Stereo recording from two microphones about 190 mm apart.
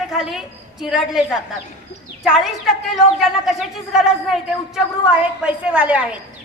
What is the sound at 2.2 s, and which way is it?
A woman's voice, centre (ahead or behind).